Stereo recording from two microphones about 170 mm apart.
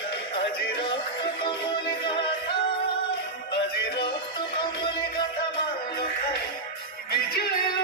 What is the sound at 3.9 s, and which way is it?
Music, 30° left (ahead or behind).